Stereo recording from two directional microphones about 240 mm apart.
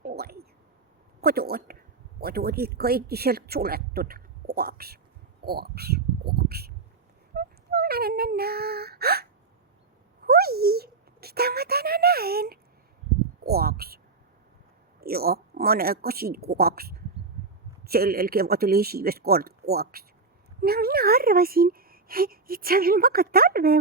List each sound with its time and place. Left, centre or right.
0.0 s a sound: right
1.2 s speech: right
5.5 s a sound: right
7.3 s speech: right
10.2 s speech: right
15.0 s speech: right